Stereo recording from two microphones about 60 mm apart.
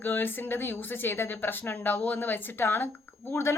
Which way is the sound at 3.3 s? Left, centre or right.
Left.